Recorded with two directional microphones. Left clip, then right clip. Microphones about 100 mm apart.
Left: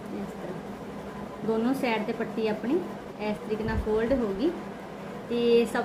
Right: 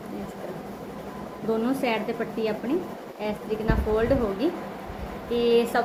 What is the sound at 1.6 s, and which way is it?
Speech, 30° left (ahead or behind).